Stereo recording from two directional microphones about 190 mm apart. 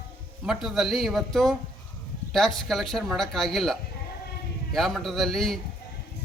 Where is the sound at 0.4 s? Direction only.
Centre (ahead or behind).